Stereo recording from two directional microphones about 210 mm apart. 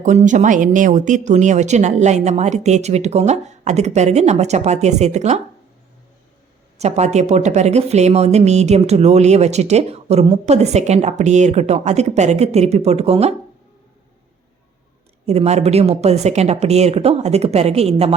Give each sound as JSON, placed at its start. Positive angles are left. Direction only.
{"t": 0.0, "sound": "speech", "side_deg": -35}
{"t": 6.7, "sound": "speech", "side_deg": -30}
{"t": 15.3, "sound": "speech", "side_deg": -30}